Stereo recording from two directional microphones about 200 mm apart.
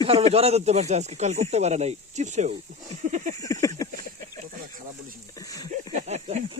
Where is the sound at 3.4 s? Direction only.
15° left (ahead or behind).